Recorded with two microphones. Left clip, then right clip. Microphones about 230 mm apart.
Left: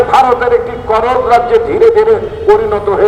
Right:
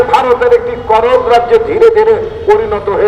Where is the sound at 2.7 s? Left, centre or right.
Left.